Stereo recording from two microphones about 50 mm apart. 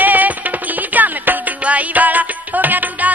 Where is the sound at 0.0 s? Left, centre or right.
Right.